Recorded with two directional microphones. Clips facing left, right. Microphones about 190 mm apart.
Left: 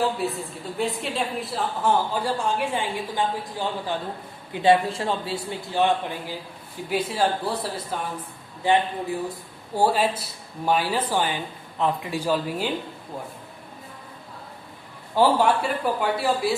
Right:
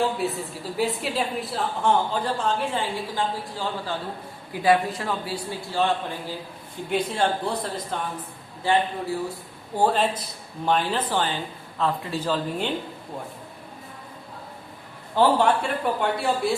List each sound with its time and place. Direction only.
0.2 s a woman's voice: centre (ahead or behind); by 6.0 s 15° left (ahead or behind)
6.9 s a woman's voice: 5° left (ahead or behind)
8.6 s speech: 20° left (ahead or behind)
15.1 s a woman's voice: 10° left (ahead or behind)